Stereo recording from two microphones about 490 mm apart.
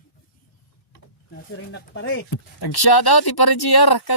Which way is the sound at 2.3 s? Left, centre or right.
Left.